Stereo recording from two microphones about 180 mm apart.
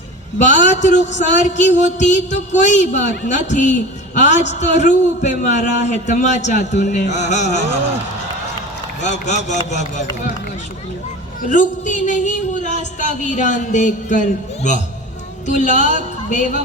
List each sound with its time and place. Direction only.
0.3 s a man's voice: 45° left (ahead or behind)
9.0 s speech: 40° left (ahead or behind)
11.4 s a man's voice: 45° left (ahead or behind)